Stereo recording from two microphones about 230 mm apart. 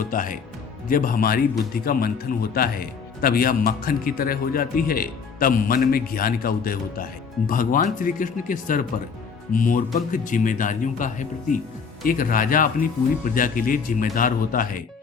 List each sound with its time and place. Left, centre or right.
0.0 s speech: left